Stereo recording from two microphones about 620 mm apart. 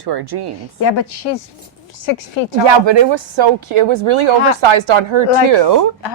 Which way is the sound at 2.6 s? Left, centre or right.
Right.